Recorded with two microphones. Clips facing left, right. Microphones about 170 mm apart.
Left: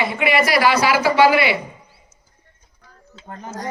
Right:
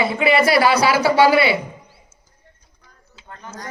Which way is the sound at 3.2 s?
40° left (ahead or behind).